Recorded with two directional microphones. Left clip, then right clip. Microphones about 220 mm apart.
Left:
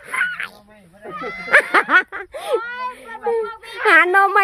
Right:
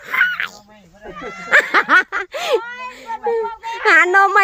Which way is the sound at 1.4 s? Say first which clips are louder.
Right 1 dB; 5° right (ahead or behind).